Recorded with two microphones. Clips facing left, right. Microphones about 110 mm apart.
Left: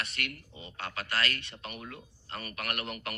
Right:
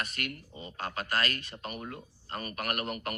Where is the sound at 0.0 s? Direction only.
40° right (ahead or behind).